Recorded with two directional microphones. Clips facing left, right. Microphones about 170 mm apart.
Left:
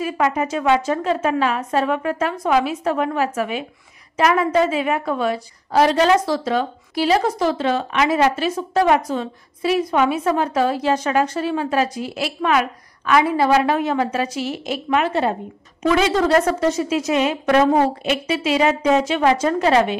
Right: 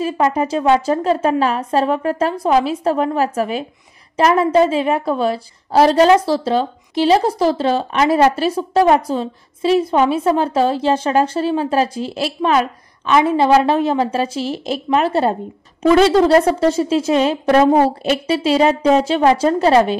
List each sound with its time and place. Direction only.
0.0 s a woman's voice: 30° right (ahead or behind)